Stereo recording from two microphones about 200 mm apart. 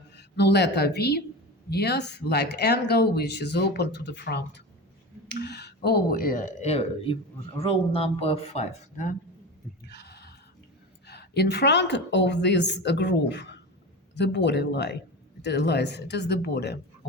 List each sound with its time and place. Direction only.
0.2 s speech: 55° left (ahead or behind); by 9.1 s 35° left (ahead or behind)
9.8 s a sound: 55° left (ahead or behind)
11.0 s speech: 55° left (ahead or behind)